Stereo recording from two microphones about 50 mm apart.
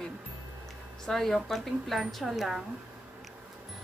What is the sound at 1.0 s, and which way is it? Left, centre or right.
Speech, centre.